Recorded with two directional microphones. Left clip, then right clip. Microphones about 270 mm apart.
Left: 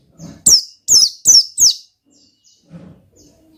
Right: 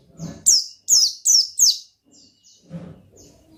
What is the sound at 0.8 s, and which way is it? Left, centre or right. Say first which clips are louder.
Bird: left 6 dB; left.